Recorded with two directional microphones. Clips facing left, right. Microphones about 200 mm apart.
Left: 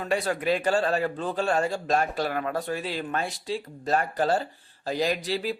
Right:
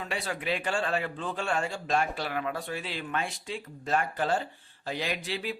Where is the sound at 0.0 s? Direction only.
45° left (ahead or behind).